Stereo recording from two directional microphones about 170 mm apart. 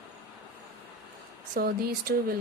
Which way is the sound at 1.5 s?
65° right (ahead or behind).